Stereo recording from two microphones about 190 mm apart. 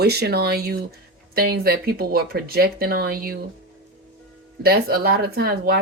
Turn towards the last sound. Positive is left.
turn(degrees=-55)  # may be behind; listen again after turning